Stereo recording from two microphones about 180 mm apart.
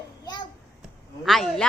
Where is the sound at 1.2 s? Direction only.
Centre (ahead or behind).